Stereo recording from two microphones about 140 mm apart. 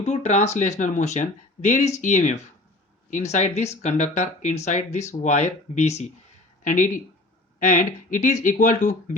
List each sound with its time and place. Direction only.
0.0 s speech: 55° left (ahead or behind)
6.7 s speech: 65° left (ahead or behind)